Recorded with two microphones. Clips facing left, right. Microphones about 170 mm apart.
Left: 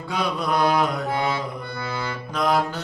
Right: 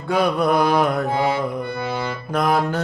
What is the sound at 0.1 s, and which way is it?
Mantra, 55° right (ahead or behind).